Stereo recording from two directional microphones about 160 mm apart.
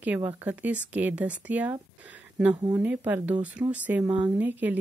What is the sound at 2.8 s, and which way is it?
Speech, 10° right (ahead or behind).